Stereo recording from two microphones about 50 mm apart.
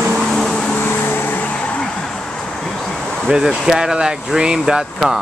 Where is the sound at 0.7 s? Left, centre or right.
Left.